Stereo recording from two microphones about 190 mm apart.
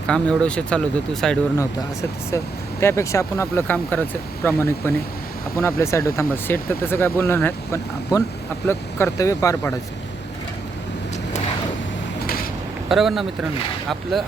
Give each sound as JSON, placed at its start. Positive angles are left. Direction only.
{"t": 0.1, "sound": "speech", "side_deg": 5}
{"t": 1.5, "sound": "speech", "side_deg": 15}
{"t": 12.2, "sound": "a sound", "side_deg": 50}
{"t": 12.9, "sound": "speech", "side_deg": 0}